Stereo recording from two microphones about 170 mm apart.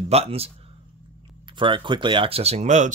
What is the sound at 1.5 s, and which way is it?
Speech, 30° right (ahead or behind).